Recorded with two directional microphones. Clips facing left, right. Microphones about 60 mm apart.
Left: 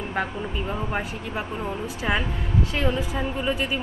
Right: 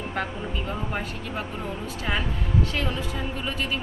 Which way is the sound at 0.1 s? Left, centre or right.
Centre.